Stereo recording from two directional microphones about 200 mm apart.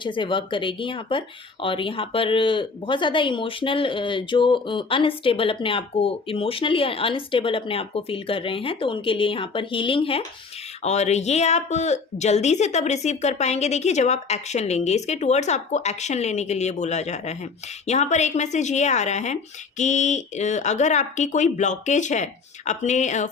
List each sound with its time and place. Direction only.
0.0 s a woman's voice: 25° left (ahead or behind)